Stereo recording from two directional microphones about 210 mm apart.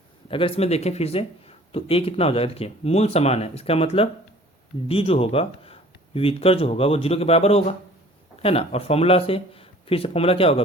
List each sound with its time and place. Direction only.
0.3 s speech: 25° left (ahead or behind)